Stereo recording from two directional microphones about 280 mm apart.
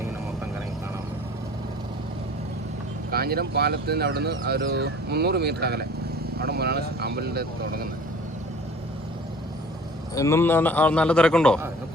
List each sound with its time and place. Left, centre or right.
3.1 s speech: right
10.2 s a man's voice: centre